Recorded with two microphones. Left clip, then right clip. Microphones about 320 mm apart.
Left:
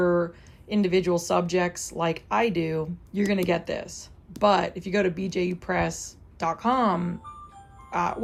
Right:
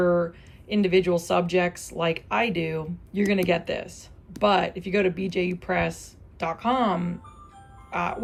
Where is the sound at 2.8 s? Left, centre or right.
Centre.